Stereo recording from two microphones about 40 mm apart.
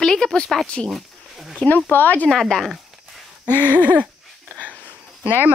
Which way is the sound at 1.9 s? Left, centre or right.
Left.